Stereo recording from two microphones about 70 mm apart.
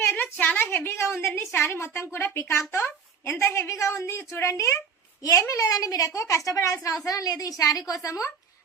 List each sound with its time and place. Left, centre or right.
0.0 s a woman's voice: left
7.0 s a woman's voice: left